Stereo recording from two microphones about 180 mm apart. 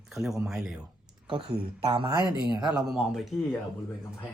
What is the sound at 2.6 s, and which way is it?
Speech, centre (ahead or behind).